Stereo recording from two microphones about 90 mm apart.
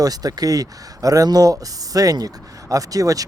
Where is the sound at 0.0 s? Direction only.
45° right (ahead or behind).